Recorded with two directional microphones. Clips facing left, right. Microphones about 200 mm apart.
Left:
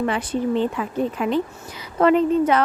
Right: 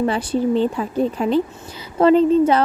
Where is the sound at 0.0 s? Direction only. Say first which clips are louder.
Right 3 dB; 30° right (ahead or behind).